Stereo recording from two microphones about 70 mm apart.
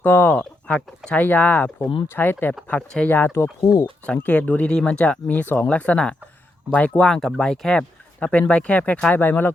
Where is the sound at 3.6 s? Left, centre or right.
Left.